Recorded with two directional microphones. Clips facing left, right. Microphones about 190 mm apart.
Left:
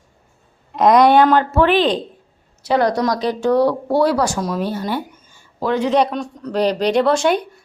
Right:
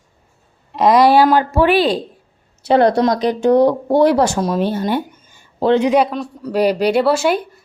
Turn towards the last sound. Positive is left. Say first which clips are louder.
# even
turn(degrees=-5)  # may be behind; listen again after turning